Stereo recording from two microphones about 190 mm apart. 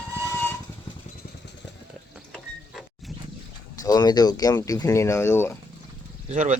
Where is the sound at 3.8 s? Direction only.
20° left (ahead or behind).